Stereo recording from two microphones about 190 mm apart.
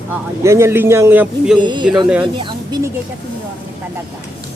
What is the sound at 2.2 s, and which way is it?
Speech, 25° right (ahead or behind).